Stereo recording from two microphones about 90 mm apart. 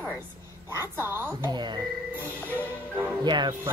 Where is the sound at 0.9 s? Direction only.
25° right (ahead or behind).